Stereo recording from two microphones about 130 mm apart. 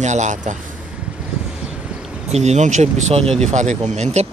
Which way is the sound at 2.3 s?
60° right (ahead or behind).